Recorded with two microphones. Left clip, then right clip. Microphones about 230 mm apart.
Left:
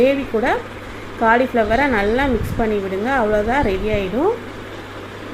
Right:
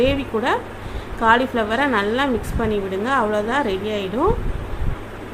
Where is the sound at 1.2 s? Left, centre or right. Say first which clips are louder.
Left 2 dB; centre.